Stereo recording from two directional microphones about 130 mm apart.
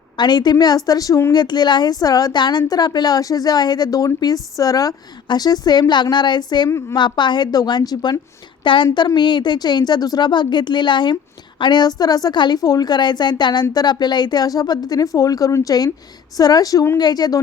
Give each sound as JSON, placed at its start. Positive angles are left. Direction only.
{"t": 0.2, "sound": "speech", "side_deg": 35}